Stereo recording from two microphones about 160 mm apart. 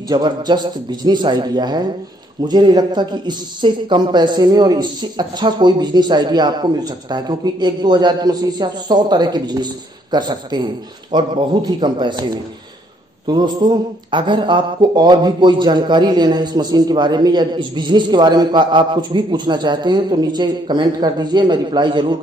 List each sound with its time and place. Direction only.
0.1 s speech: 25° right (ahead or behind)